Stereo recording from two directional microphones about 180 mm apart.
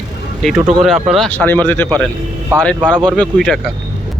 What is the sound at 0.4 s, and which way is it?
Speech, centre (ahead or behind).